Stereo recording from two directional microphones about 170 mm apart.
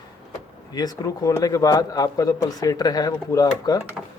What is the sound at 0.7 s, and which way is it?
A man's voice, 25° left (ahead or behind).